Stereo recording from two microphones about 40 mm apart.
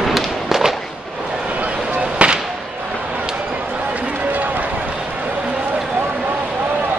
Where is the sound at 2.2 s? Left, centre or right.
Right.